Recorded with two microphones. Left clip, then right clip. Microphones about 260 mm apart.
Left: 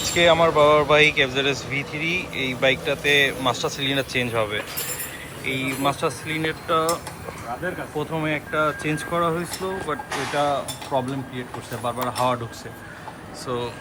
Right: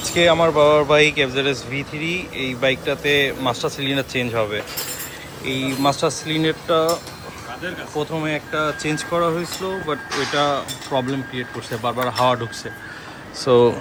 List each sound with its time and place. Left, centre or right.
0.0 s speech: centre
7.9 s speech: centre
13.4 s speech: centre